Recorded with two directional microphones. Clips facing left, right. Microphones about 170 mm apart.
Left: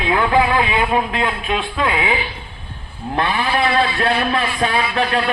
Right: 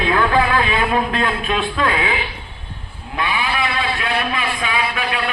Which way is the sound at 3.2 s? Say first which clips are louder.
Left 3 dB; 45° left (ahead or behind).